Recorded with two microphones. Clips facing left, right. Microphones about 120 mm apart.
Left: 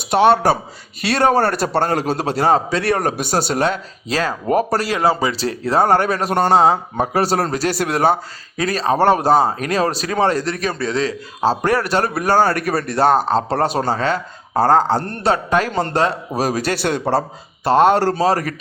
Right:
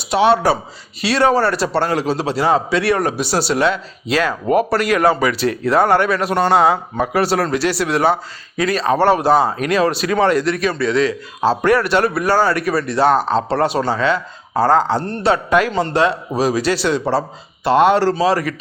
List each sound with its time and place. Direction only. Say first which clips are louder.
0.1 s a man's voice: left 1 dB; 50° left (ahead or behind)